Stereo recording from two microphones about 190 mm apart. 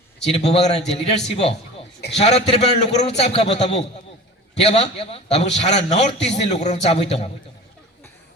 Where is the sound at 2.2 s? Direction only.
35° left (ahead or behind).